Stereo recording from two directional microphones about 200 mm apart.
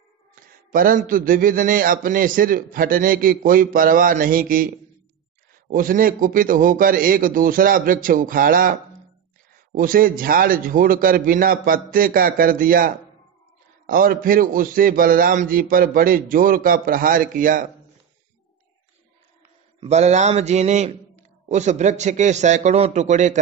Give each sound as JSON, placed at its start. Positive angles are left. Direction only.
{"t": 0.3, "sound": "a man's voice", "side_deg": -45}
{"t": 19.8, "sound": "a man's voice", "side_deg": -35}